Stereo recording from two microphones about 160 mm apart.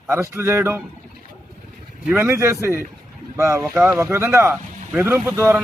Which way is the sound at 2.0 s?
15° right (ahead or behind).